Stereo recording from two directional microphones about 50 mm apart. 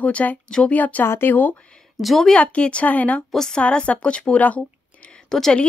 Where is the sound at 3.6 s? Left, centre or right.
Left.